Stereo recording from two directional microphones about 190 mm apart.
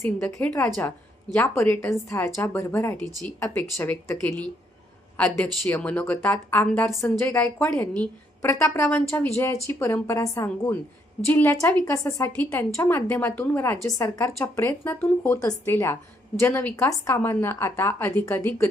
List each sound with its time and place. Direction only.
0.0 s a woman's voice: 15° left (ahead or behind)